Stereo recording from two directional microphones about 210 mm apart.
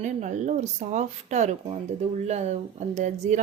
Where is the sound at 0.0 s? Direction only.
35° right (ahead or behind).